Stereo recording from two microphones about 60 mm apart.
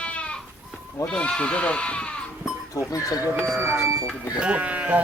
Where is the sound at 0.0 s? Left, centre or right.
Centre.